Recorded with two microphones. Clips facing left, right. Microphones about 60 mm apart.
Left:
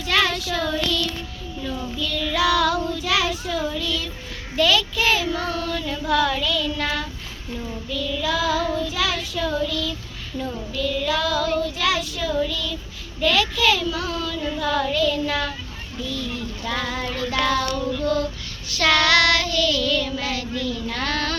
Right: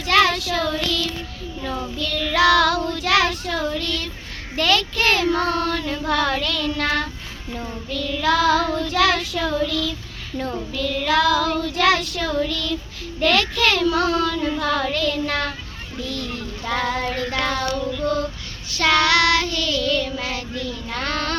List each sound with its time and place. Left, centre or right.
0.1 s child singing: right
11.6 s child singing: right
13.2 s child singing: right
14.4 s child singing: right
16.6 s child singing: right
18.7 s child singing: right